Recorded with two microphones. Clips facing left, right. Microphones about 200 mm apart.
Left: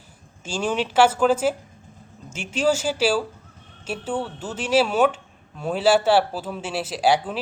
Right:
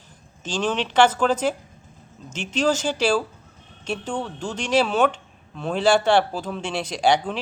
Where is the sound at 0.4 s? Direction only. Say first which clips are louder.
Even; 10° left (ahead or behind).